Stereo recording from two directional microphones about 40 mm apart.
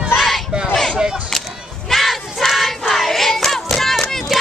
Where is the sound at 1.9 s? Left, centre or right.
Centre.